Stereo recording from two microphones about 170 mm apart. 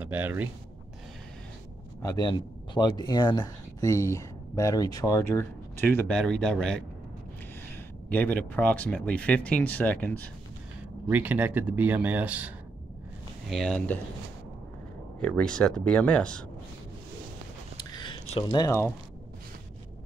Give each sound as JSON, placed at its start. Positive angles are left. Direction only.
{"t": 0.0, "sound": "speech", "side_deg": -10}
{"t": 2.0, "sound": "speech", "side_deg": 20}
{"t": 11.1, "sound": "speech", "side_deg": -10}
{"t": 13.5, "sound": "speech", "side_deg": 0}
{"t": 15.1, "sound": "speech", "side_deg": 5}
{"t": 17.7, "sound": "a sound", "side_deg": 25}